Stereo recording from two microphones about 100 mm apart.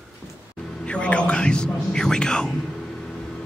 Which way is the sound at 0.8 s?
10° left (ahead or behind).